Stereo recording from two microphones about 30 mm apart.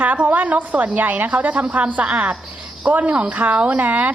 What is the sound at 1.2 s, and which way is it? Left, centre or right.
A woman's voice, right.